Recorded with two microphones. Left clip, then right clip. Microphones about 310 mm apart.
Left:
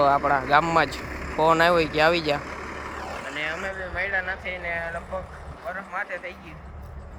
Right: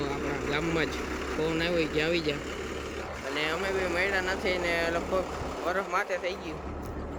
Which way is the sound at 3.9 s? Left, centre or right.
Centre.